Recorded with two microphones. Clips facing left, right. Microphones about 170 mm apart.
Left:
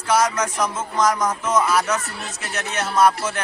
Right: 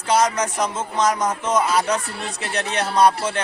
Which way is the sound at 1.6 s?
30° right (ahead or behind).